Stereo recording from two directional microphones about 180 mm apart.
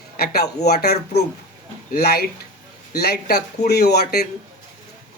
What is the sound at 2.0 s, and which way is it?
Speech, 60° left (ahead or behind).